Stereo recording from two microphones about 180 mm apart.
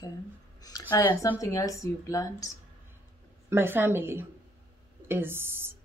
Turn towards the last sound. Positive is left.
turn(degrees=-15)  # may be behind; listen again after turning